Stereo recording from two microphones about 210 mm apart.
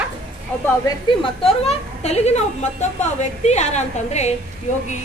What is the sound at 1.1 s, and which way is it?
A woman's voice, 30° left (ahead or behind).